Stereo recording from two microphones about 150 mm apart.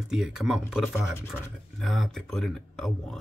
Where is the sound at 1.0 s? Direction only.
15° left (ahead or behind).